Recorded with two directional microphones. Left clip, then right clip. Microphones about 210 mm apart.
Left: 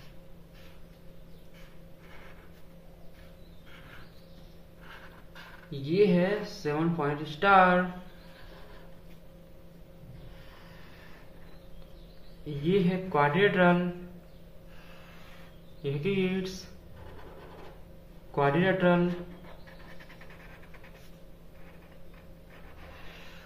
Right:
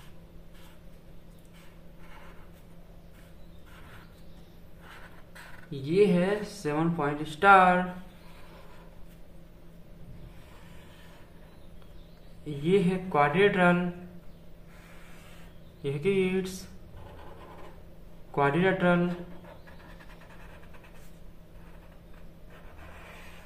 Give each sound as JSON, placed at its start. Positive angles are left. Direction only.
{"t": 5.7, "sound": "speech", "side_deg": -15}
{"t": 12.4, "sound": "a man's voice", "side_deg": -15}
{"t": 15.8, "sound": "a sound", "side_deg": -15}
{"t": 18.3, "sound": "speech", "side_deg": -10}